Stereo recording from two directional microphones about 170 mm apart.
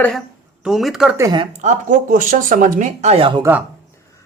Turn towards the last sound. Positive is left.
turn(degrees=-10)  # may be behind; listen again after turning